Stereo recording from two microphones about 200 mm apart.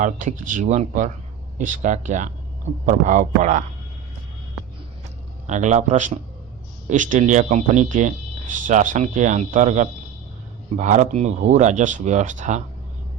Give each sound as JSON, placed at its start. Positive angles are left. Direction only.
{"t": 0.0, "sound": "speech", "side_deg": -40}
{"t": 5.5, "sound": "speech", "side_deg": -35}